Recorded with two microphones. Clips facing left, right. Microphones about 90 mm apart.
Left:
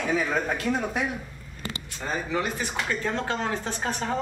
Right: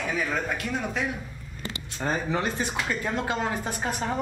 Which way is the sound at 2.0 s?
30° right (ahead or behind).